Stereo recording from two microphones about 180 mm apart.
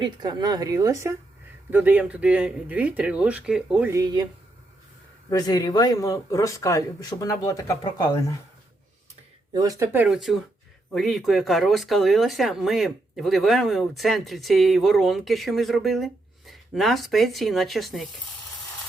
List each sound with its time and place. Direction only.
0.0 s speech: 25° right (ahead or behind); by 3.8 s 5° right (ahead or behind)
3.8 s speech: 20° right (ahead or behind)
5.3 s speech: 20° left (ahead or behind)
9.5 s speech: 20° right (ahead or behind); by 18.1 s centre (ahead or behind)